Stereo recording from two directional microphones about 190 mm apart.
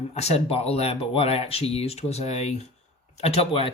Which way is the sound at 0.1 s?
35° left (ahead or behind).